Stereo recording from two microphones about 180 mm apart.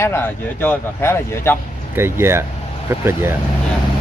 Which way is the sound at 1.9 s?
15° right (ahead or behind).